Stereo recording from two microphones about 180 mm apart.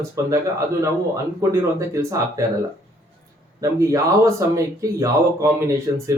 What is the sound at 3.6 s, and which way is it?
Speech, 20° right (ahead or behind).